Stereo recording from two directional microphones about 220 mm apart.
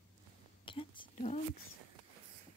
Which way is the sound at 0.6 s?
25° left (ahead or behind).